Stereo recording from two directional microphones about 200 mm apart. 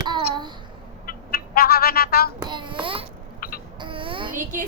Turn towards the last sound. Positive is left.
turn(degrees=-40)  # may be behind; listen again after turning